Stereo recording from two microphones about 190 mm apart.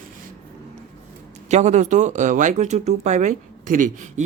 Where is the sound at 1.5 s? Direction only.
35° right (ahead or behind).